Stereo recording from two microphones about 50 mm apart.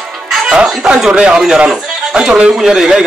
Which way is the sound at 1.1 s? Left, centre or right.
Centre.